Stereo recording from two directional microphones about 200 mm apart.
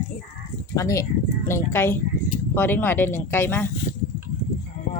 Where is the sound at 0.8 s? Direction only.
15° left (ahead or behind).